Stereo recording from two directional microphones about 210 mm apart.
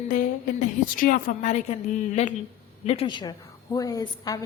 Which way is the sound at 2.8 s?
25° left (ahead or behind).